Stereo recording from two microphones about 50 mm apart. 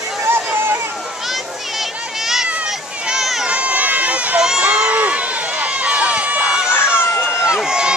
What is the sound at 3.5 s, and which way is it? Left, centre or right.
Run, right.